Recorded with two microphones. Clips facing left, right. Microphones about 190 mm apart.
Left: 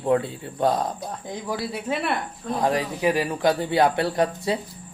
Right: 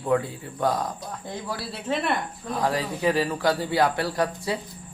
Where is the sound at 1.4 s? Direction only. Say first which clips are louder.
Left 5 dB; 15° left (ahead or behind).